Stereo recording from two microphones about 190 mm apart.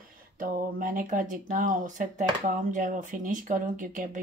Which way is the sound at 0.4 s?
45° right (ahead or behind).